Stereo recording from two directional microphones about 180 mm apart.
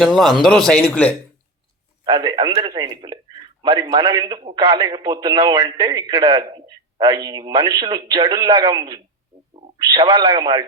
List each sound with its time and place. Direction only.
0.0 s a man's voice: centre (ahead or behind)
2.0 s a man's voice: 25° right (ahead or behind)